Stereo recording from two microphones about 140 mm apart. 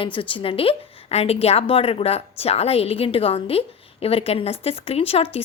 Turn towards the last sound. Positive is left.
turn(degrees=45)  # may be behind; listen again after turning